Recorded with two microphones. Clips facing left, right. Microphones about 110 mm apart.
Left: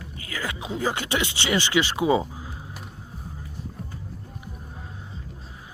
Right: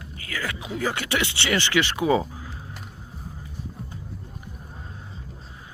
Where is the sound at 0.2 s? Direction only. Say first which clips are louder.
Even; 20° left (ahead or behind).